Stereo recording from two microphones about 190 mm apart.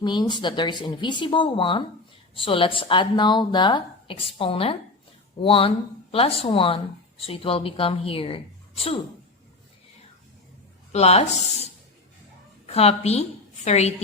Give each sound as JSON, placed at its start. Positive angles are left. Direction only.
{"t": 0.0, "sound": "speech", "side_deg": 25}
{"t": 10.9, "sound": "a woman's voice", "side_deg": 35}